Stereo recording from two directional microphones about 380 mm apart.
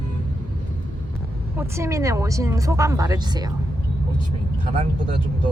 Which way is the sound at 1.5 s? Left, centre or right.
Centre.